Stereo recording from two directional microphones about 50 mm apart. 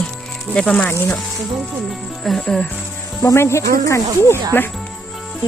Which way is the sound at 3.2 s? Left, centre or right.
Left.